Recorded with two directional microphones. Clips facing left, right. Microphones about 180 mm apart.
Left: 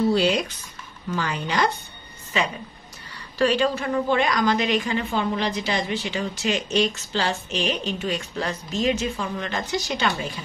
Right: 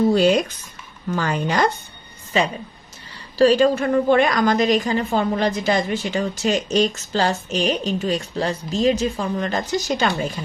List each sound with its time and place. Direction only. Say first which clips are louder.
0.1 s a woman's voice: right 5 dB; 45° right (ahead or behind)
3.3 s a woman's voice: right 6 dB; 40° right (ahead or behind)